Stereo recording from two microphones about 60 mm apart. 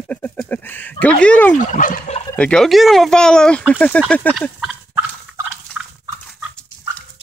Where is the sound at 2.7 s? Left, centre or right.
Centre.